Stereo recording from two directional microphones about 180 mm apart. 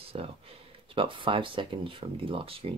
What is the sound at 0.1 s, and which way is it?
Speech, 35° right (ahead or behind).